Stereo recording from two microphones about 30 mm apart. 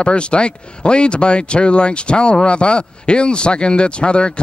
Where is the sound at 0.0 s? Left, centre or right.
Left.